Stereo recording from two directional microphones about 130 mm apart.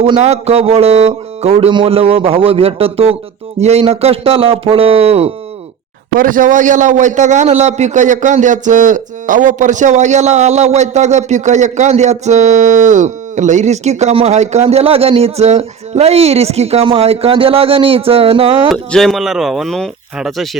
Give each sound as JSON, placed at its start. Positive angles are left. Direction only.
{"t": 0.2, "sound": "speech", "side_deg": -55}
{"t": 6.1, "sound": "a man's voice", "side_deg": -90}
{"t": 18.7, "sound": "speech", "side_deg": 0}